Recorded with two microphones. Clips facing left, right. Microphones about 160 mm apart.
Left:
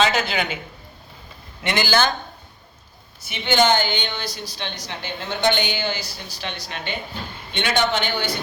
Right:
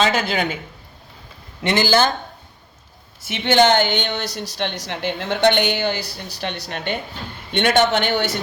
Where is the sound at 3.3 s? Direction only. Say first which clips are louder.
Right 3 dB; 70° right (ahead or behind).